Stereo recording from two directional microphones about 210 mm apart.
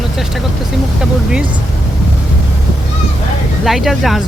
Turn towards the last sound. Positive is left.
turn(degrees=0)  # may be behind; listen again after turning